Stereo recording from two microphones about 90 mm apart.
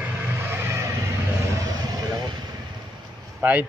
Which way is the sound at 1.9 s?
45° right (ahead or behind).